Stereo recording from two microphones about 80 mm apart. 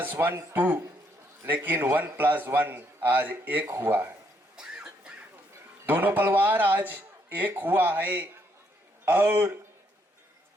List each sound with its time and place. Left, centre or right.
0.0 s a man's voice: right
4.5 s a sound: centre
5.8 s a man's voice: right